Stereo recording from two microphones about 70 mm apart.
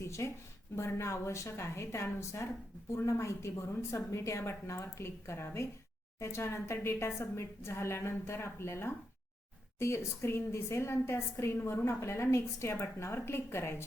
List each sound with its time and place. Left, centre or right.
0.0 s a woman's voice: left